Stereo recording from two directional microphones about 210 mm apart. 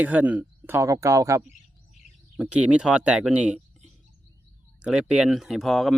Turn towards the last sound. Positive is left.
turn(degrees=0)  # may be behind; listen again after turning